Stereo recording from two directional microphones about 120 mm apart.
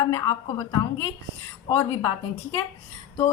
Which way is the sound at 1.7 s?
35° left (ahead or behind).